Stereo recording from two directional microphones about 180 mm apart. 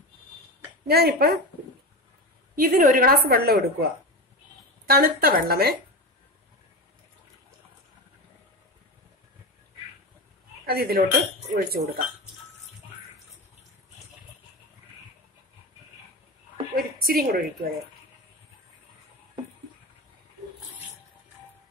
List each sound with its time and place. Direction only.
0.8 s a woman's voice: 60° right (ahead or behind)
2.5 s a woman's voice: 55° right (ahead or behind)
10.6 s a woman's voice: 55° right (ahead or behind)
16.7 s a woman's voice: 55° right (ahead or behind)